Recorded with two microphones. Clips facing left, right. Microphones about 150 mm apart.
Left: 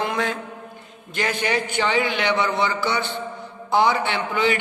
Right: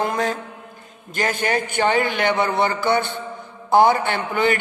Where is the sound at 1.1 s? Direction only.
45° right (ahead or behind).